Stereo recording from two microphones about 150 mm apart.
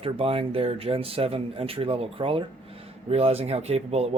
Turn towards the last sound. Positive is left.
turn(degrees=-45)  # may be behind; listen again after turning